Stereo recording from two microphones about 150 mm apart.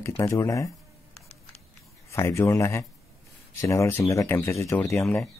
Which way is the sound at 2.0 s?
20° left (ahead or behind).